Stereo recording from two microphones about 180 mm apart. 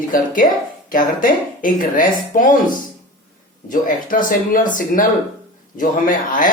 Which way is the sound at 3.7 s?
50° left (ahead or behind).